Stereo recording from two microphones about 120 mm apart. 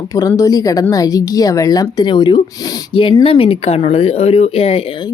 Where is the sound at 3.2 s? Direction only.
50° left (ahead or behind).